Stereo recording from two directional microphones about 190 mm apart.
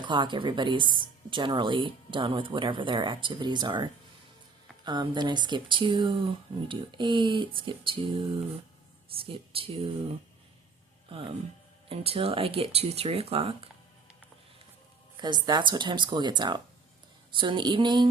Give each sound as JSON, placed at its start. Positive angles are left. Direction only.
{"t": 0.0, "sound": "speech", "side_deg": -25}
{"t": 4.9, "sound": "speech", "side_deg": -20}
{"t": 11.1, "sound": "speech", "side_deg": -30}
{"t": 15.2, "sound": "speech", "side_deg": -20}